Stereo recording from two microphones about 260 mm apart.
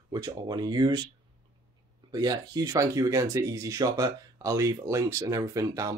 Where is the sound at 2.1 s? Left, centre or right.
Centre.